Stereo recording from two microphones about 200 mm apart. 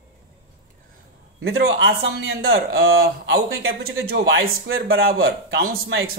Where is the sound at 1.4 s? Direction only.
60° right (ahead or behind).